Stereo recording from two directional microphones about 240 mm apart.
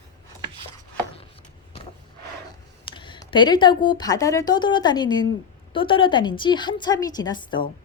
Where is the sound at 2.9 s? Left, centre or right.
Centre.